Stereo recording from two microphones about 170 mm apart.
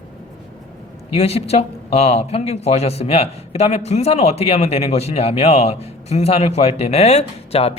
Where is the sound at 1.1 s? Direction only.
35° left (ahead or behind).